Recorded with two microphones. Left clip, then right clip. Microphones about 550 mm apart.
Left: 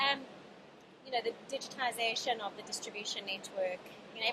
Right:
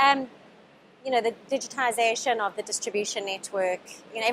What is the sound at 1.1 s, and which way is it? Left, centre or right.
A woman's voice, right.